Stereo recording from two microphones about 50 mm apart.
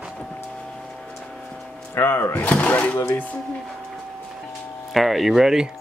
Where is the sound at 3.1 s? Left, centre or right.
Left.